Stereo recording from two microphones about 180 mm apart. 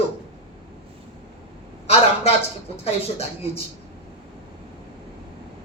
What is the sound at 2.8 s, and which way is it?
Speech, 35° left (ahead or behind).